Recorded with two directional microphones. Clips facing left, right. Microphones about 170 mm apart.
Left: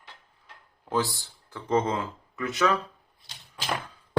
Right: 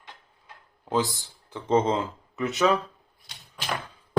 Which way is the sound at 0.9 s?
20° right (ahead or behind).